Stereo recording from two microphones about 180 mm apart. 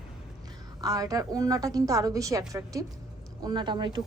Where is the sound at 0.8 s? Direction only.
20° right (ahead or behind).